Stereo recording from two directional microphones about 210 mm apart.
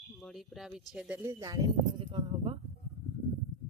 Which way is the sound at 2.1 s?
25° right (ahead or behind).